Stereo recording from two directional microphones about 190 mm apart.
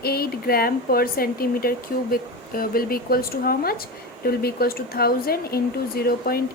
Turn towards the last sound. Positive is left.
turn(degrees=55)  # may be behind; listen again after turning